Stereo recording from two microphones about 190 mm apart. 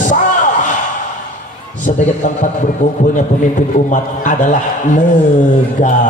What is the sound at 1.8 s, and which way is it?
Speech, 40° left (ahead or behind).